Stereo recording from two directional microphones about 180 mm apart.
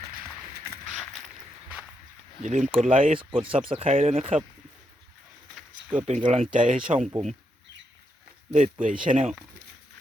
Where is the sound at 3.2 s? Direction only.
30° right (ahead or behind).